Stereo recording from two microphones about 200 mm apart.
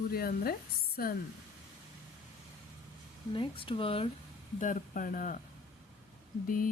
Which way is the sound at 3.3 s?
25° left (ahead or behind).